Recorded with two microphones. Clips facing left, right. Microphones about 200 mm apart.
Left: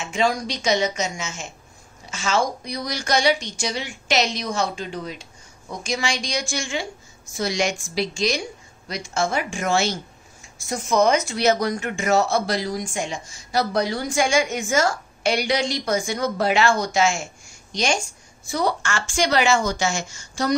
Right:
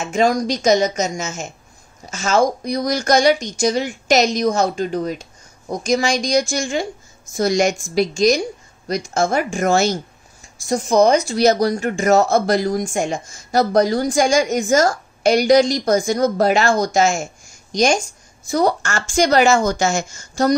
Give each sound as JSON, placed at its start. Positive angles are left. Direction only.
{"t": 0.0, "sound": "a woman's voice", "side_deg": -45}